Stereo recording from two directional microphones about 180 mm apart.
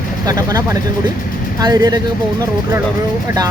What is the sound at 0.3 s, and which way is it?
Speech, 20° right (ahead or behind).